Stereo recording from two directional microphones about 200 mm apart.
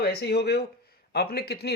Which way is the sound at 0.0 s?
55° left (ahead or behind).